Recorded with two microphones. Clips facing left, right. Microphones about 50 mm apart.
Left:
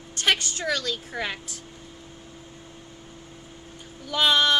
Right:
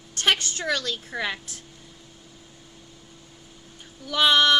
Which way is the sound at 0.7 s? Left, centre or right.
Right.